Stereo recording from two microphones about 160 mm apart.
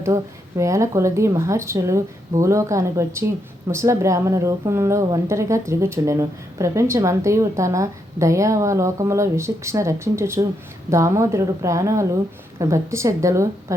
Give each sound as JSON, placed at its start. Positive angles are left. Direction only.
{"t": 0.0, "sound": "a woman's voice", "side_deg": -20}